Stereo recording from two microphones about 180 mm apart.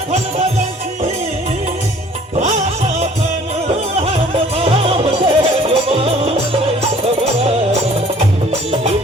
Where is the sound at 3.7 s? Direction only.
35° right (ahead or behind).